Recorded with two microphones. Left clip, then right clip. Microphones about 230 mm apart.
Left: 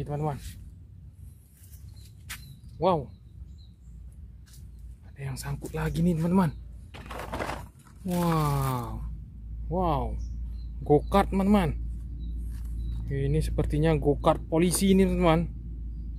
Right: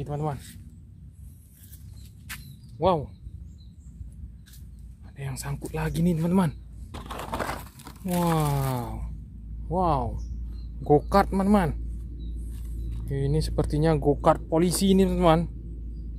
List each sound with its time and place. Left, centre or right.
0.0 s speech: centre
2.2 s a sound: centre
5.1 s speech: centre
7.0 s a sound: centre
8.1 s speech: centre
13.1 s speech: centre